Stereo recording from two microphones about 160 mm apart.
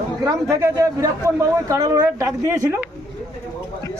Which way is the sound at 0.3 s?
20° right (ahead or behind).